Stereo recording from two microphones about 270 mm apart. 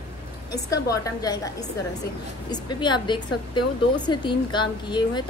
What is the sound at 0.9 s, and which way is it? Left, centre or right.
A woman's voice, centre.